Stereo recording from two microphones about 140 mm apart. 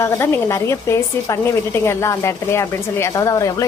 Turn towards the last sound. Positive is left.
turn(degrees=25)  # may be behind; listen again after turning